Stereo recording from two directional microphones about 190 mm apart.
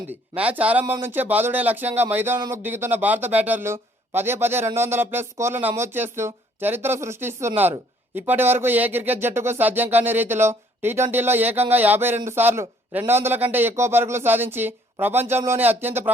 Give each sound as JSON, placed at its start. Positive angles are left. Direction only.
{"t": 0.3, "sound": "speech", "side_deg": -5}